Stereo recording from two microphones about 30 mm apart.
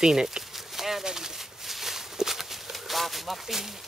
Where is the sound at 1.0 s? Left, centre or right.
Centre.